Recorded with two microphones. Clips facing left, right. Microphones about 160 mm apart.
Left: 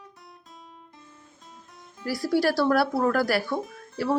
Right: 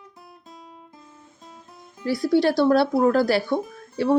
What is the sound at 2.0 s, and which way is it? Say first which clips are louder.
Speech: right 4 dB; 20° right (ahead or behind).